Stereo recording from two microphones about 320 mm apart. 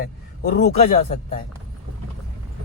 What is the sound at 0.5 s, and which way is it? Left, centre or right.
Speech, left.